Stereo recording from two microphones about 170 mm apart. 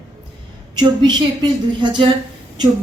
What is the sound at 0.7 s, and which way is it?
Speech, 25° right (ahead or behind).